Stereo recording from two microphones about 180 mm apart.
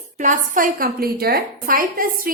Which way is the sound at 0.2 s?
45° right (ahead or behind).